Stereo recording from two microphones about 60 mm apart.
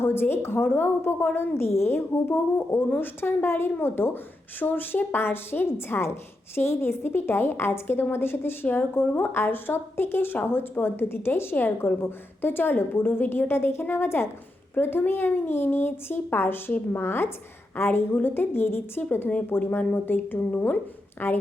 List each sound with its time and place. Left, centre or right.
0.0 s a woman's voice: left